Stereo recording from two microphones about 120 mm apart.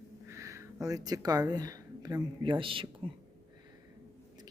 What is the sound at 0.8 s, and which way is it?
Speech, 30° right (ahead or behind).